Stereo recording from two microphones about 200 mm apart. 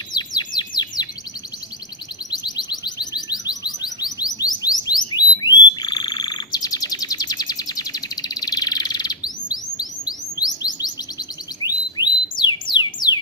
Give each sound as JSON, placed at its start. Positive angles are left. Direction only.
{"t": 0.1, "sound": "chirp", "side_deg": 20}
{"t": 2.3, "sound": "music", "side_deg": 20}
{"t": 5.8, "sound": "frog", "side_deg": 20}
{"t": 11.6, "sound": "bird", "side_deg": 20}